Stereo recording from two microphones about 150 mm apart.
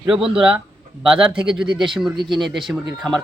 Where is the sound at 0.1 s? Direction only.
5° right (ahead or behind).